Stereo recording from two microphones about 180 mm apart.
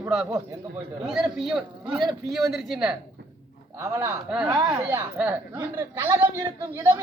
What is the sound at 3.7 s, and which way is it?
Speech, 15° right (ahead or behind).